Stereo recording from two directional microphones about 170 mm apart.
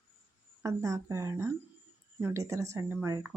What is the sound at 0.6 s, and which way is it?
Speech, 20° right (ahead or behind).